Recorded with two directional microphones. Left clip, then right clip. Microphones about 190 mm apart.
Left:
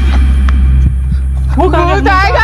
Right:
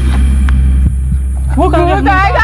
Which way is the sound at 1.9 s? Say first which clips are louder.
Left 1 dB; 50° left (ahead or behind).